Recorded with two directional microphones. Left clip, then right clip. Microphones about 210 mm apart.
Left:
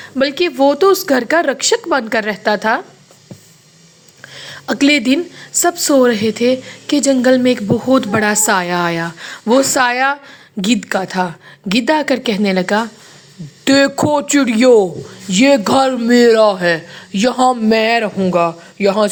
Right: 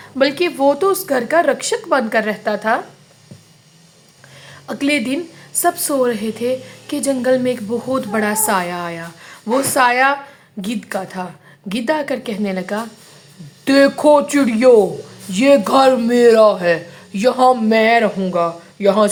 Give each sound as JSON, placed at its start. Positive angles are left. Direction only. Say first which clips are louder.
{"t": 0.0, "sound": "speech", "louder": "left 1 dB", "side_deg": 15}
{"t": 4.4, "sound": "a man's voice", "louder": "left 8 dB", "side_deg": 20}